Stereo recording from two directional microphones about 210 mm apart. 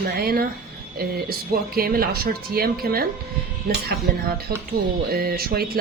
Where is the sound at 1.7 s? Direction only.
45° right (ahead or behind).